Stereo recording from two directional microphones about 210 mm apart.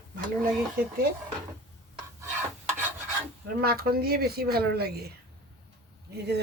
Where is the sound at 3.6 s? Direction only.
45° right (ahead or behind).